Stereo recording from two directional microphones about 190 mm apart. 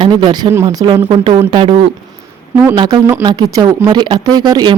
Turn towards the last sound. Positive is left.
turn(degrees=-20)  # may be behind; listen again after turning